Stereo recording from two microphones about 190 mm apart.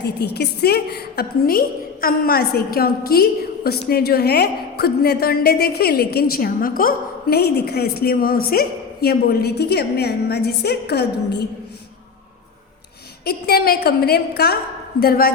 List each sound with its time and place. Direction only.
0.0 s a woman's voice: 60° left (ahead or behind)
13.2 s a woman's voice: 55° left (ahead or behind)